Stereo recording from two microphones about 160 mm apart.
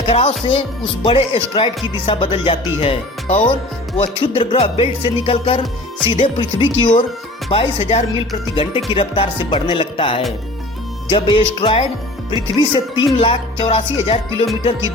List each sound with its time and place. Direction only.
0.1 s speech: 35° left (ahead or behind)